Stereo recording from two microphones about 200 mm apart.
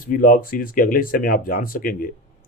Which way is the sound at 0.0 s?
45° left (ahead or behind).